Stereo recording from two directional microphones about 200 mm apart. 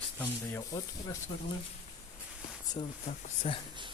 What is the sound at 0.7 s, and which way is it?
Speech, 15° left (ahead or behind).